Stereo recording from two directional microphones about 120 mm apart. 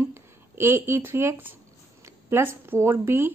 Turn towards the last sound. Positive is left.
turn(degrees=-20)  # may be behind; listen again after turning